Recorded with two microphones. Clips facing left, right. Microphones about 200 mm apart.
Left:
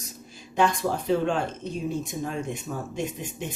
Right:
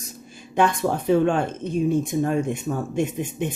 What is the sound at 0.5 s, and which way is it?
Speech, 55° right (ahead or behind).